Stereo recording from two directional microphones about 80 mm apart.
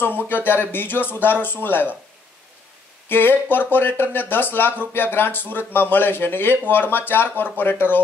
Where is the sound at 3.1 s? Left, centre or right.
Left.